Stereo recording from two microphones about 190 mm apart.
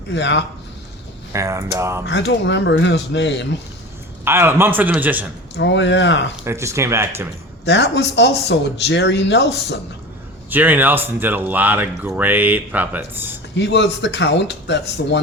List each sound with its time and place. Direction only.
0.1 s speech: 70° left (ahead or behind)
1.3 s speech: 15° right (ahead or behind)
2.0 s speech: 65° left (ahead or behind)
4.3 s speech: 10° right (ahead or behind)
5.5 s speech: 65° left (ahead or behind)
6.3 s speech: 15° right (ahead or behind)
7.6 s speech: 65° left (ahead or behind)
10.5 s speech: 10° right (ahead or behind)
13.6 s speech: 65° left (ahead or behind)